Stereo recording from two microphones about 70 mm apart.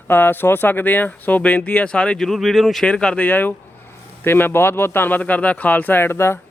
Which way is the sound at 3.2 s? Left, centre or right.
Left.